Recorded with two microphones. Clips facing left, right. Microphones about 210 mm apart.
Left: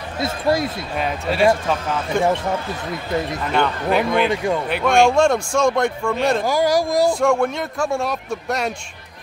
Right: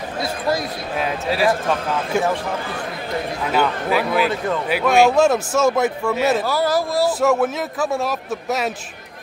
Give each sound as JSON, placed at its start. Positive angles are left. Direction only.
{"t": 0.2, "sound": "speech", "side_deg": 25}
{"t": 0.9, "sound": "speech", "side_deg": 0}
{"t": 3.5, "sound": "speech", "side_deg": -5}
{"t": 6.4, "sound": "speech", "side_deg": 15}
{"t": 7.1, "sound": "speech", "side_deg": -5}